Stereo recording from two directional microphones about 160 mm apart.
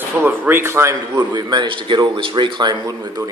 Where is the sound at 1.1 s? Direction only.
25° right (ahead or behind).